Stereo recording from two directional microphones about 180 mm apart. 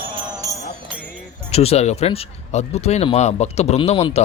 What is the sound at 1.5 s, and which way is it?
Speech, 35° left (ahead or behind).